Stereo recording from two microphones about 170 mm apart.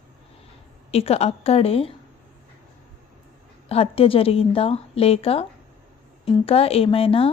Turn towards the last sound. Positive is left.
turn(degrees=35)  # may be behind; listen again after turning